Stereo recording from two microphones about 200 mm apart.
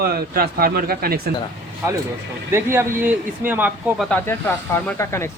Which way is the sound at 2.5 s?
10° right (ahead or behind).